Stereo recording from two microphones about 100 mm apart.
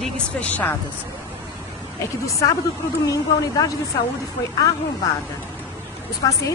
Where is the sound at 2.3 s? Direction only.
30° left (ahead or behind).